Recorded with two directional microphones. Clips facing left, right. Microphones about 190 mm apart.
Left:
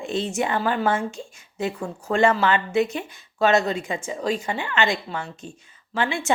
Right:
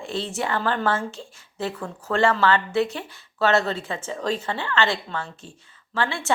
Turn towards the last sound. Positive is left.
turn(degrees=15)  # may be behind; listen again after turning